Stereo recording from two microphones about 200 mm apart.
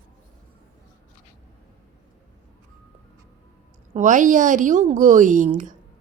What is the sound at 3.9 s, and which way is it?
A woman's voice, 40° right (ahead or behind).